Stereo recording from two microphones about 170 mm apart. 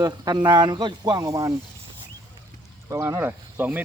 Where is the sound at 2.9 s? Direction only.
15° right (ahead or behind).